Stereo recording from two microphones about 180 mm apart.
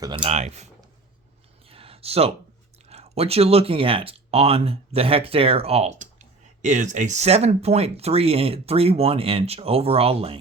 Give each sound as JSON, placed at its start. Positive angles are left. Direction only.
{"t": 0.0, "sound": "speech", "side_deg": -25}
{"t": 1.7, "sound": "a sound", "side_deg": -30}
{"t": 2.9, "sound": "speech", "side_deg": -35}